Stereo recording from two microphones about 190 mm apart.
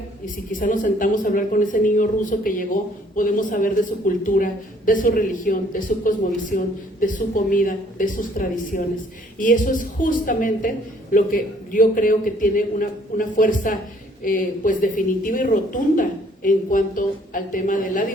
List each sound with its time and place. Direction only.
0.6 s a woman's voice: 45° left (ahead or behind)